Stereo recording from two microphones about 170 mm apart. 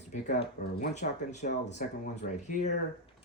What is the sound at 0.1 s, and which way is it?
Speech, 45° left (ahead or behind).